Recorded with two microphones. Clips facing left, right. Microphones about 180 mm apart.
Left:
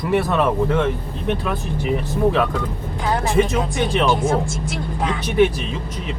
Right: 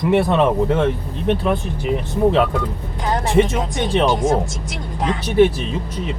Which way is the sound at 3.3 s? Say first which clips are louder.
Right 3 dB; 30° right (ahead or behind).